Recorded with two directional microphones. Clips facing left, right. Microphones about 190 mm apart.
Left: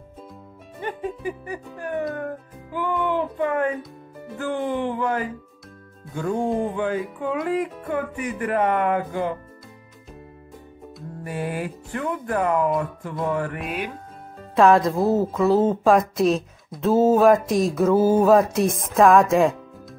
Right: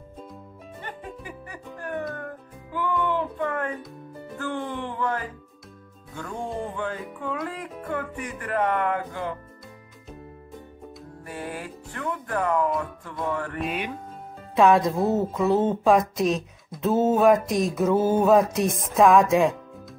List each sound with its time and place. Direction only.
0.8 s music: 15° left (ahead or behind)
2.7 s speech: 15° left (ahead or behind)
4.4 s music: 15° left (ahead or behind)
11.2 s music: 10° left (ahead or behind)
13.6 s speech: centre (ahead or behind)